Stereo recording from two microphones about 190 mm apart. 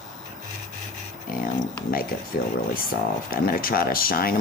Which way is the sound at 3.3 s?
50° left (ahead or behind).